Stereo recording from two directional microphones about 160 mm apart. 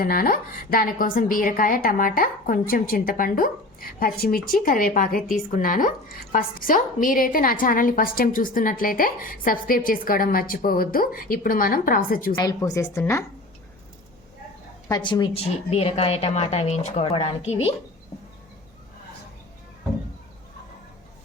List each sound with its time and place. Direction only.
0.0 s a woman's voice: 65° left (ahead or behind)
12.4 s a woman's voice: 20° left (ahead or behind)
14.8 s a woman's voice: 25° left (ahead or behind)
15.4 s speech: 40° left (ahead or behind)